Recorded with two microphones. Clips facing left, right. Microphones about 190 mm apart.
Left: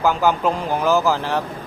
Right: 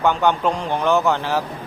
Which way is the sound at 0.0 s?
Centre (ahead or behind).